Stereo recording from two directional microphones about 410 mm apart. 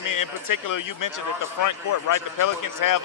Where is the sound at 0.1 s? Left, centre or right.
Left.